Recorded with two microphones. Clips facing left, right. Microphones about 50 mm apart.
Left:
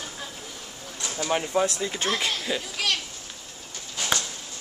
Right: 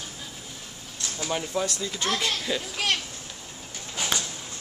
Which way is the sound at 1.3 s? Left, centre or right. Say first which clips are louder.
Left 4 dB; left.